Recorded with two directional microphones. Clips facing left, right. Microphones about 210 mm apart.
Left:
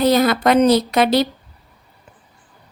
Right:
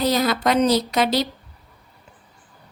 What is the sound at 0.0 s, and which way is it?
Speech, 55° left (ahead or behind).